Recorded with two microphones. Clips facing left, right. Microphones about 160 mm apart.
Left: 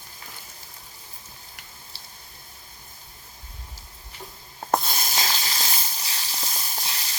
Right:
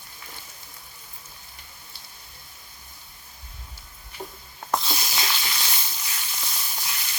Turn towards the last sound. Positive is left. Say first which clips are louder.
# left 1 dB
turn(degrees=30)  # may be behind; listen again after turning